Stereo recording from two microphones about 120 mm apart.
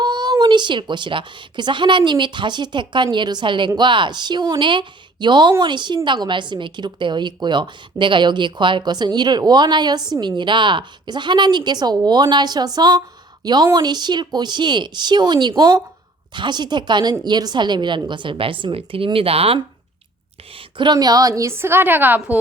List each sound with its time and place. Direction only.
0.0 s a woman's voice: 35° right (ahead or behind); by 19.5 s 55° right (ahead or behind)
20.6 s a woman's voice: 40° right (ahead or behind); by 22.4 s 15° right (ahead or behind)